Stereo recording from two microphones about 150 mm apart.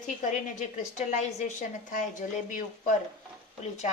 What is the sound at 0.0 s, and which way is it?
A woman's voice, 60° left (ahead or behind).